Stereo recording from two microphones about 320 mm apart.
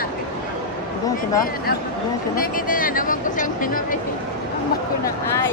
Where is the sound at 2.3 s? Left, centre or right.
Left.